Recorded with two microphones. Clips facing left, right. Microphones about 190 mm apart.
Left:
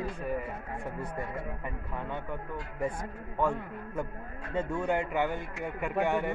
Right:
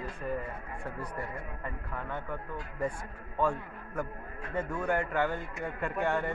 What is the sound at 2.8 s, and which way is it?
A man's voice, 20° left (ahead or behind).